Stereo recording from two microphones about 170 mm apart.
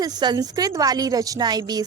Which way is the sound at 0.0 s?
25° right (ahead or behind).